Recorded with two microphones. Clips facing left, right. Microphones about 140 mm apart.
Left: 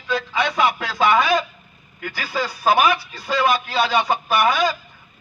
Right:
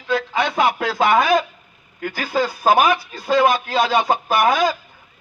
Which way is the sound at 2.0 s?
45° right (ahead or behind).